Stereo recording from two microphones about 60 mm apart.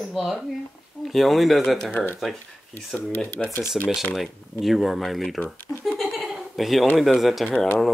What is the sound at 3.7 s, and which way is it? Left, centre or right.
Speech, centre.